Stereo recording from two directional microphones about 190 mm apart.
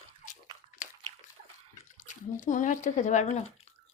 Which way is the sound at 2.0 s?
40° left (ahead or behind).